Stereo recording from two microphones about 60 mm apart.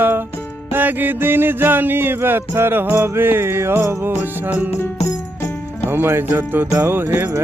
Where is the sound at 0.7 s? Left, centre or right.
Right.